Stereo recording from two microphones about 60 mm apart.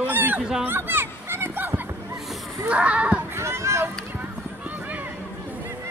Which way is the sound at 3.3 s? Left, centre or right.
Right.